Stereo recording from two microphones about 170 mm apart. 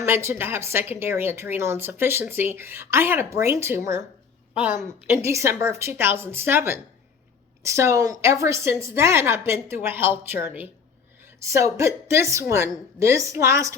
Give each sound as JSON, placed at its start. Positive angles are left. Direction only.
{"t": 0.0, "sound": "a woman's voice", "side_deg": -15}
{"t": 5.0, "sound": "a woman's voice", "side_deg": -15}